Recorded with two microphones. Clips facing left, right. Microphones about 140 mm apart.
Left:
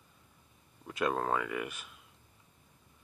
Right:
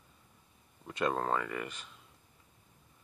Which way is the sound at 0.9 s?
5° left (ahead or behind).